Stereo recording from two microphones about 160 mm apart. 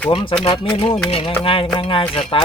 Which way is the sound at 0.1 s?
30° left (ahead or behind).